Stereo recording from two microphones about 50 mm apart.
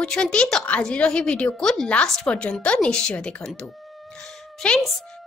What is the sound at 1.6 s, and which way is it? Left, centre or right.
Speech, centre.